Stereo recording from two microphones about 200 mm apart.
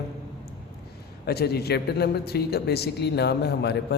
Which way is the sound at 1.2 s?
50° left (ahead or behind).